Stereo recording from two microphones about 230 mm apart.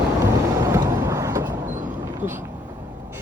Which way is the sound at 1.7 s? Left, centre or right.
Right.